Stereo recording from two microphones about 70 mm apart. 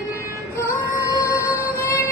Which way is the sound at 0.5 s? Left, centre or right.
Left.